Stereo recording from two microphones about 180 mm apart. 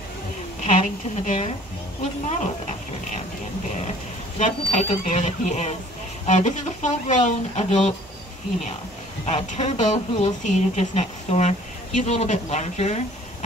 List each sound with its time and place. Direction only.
0.6 s a woman's voice: 45° left (ahead or behind)
4.4 s a woman's voice: 40° left (ahead or behind)
9.2 s a woman's voice: 40° left (ahead or behind)